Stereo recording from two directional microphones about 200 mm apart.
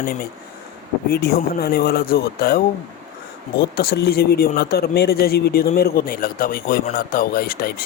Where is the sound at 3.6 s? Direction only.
50° left (ahead or behind).